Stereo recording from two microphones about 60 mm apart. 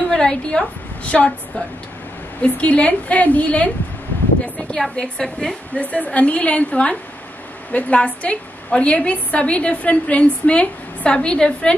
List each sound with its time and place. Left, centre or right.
0.1 s a woman's voice: centre
2.4 s a woman's voice: left
5.8 s a woman's voice: left